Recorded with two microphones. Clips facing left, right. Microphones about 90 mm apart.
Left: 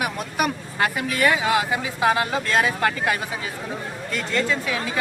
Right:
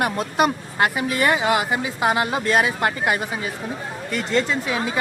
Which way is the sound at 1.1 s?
25° right (ahead or behind).